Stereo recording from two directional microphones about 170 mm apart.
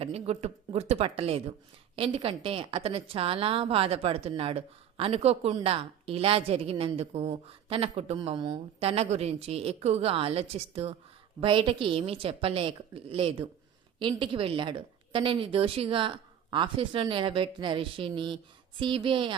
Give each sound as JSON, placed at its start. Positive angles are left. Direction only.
{"t": 0.0, "sound": "a woman's voice", "side_deg": -40}